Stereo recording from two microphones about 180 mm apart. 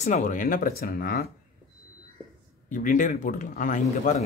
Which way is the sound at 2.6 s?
45° left (ahead or behind).